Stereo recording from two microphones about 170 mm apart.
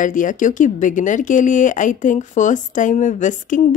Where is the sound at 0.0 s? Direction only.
50° left (ahead or behind).